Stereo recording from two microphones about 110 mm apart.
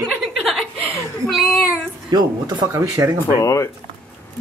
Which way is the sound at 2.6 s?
25° right (ahead or behind).